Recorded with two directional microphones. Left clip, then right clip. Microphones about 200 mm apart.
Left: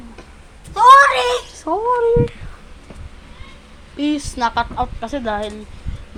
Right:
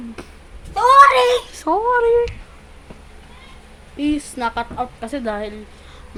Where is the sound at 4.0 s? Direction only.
Centre (ahead or behind).